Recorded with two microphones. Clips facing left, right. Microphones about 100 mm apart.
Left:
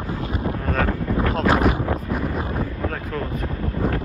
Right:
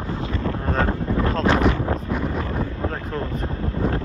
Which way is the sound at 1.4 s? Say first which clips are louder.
Left 1 dB; 5° left (ahead or behind).